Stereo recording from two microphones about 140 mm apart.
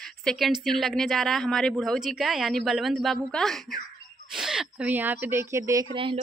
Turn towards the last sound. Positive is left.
turn(degrees=-40)  # may be behind; listen again after turning